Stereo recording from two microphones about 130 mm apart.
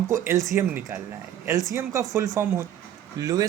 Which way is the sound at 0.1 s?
20° right (ahead or behind).